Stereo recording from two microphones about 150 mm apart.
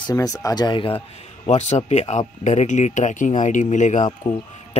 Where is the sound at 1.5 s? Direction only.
50° left (ahead or behind).